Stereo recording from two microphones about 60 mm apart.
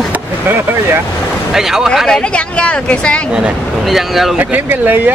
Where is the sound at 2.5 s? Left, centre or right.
Centre.